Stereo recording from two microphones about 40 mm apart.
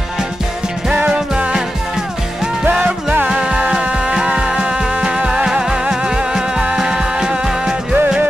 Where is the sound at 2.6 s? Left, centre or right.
Right.